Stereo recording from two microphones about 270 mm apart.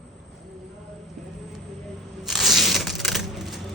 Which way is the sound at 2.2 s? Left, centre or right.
Centre.